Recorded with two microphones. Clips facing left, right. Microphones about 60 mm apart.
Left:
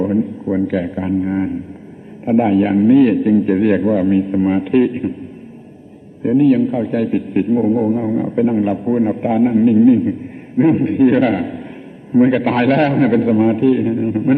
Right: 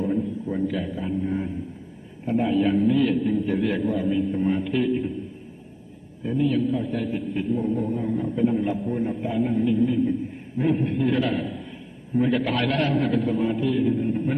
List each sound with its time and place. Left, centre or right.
0.0 s a man's voice: left
3.0 s a man's voice: left
6.2 s a man's voice: left